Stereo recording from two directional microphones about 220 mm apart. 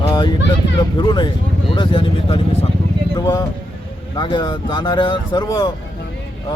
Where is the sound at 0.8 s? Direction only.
20° left (ahead or behind).